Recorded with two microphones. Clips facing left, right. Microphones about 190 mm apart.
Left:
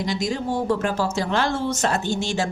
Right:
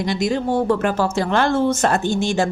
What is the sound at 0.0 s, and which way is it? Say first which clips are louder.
A woman's voice: right 4 dB; 60° right (ahead or behind).